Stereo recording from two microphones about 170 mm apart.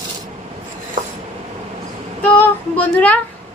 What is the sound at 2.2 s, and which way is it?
Child singing, 10° left (ahead or behind).